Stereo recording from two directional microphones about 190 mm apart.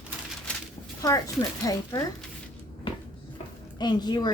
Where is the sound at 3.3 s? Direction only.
20° left (ahead or behind).